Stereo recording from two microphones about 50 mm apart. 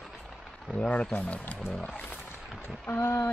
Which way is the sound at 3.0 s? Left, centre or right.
Left.